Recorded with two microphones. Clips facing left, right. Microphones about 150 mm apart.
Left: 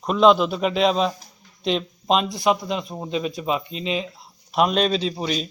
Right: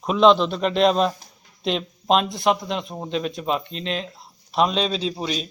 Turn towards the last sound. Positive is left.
turn(degrees=0)  # may be behind; listen again after turning